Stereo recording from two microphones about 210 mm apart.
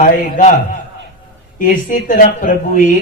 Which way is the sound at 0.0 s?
40° left (ahead or behind).